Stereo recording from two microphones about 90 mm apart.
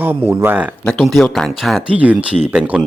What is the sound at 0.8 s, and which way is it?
Speech, 5° left (ahead or behind).